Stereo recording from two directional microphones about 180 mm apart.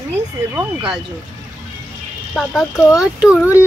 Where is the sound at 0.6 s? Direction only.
5° right (ahead or behind).